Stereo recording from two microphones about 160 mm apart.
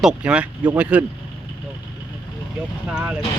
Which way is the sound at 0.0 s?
5° right (ahead or behind).